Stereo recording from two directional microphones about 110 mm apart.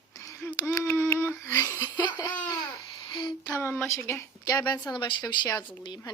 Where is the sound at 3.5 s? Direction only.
20° left (ahead or behind).